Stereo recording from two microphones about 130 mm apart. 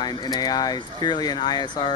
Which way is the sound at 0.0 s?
30° left (ahead or behind).